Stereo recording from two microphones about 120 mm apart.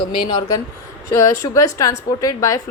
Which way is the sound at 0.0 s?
45° left (ahead or behind).